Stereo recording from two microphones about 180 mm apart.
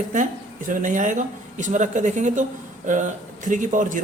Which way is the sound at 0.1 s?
45° right (ahead or behind).